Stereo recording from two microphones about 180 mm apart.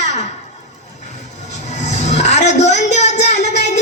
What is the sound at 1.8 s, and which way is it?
Music, 40° left (ahead or behind).